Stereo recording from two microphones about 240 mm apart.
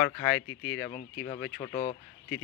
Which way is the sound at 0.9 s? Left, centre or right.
Centre.